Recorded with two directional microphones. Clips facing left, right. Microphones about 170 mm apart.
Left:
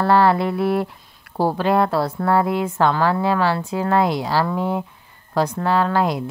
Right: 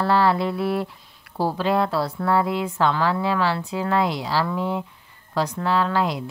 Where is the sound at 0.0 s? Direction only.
55° left (ahead or behind).